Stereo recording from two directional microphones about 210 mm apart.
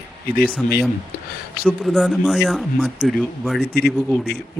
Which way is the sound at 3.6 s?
50° left (ahead or behind).